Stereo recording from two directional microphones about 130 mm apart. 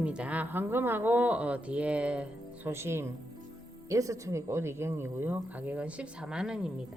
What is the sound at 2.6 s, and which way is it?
Speech, 20° right (ahead or behind).